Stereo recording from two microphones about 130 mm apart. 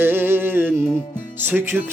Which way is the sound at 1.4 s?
15° right (ahead or behind).